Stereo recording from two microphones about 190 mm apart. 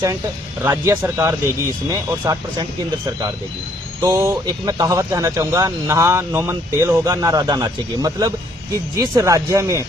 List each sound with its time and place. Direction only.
0.6 s speech: 15° right (ahead or behind)
4.0 s speech: 15° right (ahead or behind)